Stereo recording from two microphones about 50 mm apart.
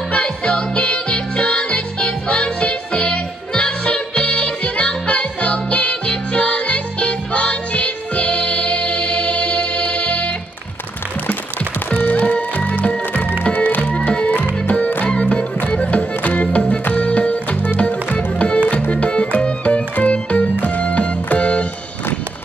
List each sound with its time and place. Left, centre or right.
0.1 s music: left
12.0 s music: left
15.0 s music: left